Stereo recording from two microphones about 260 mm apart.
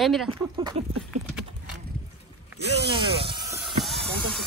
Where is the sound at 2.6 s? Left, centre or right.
Right.